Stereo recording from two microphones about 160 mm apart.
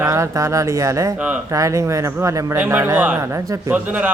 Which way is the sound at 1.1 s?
10° right (ahead or behind).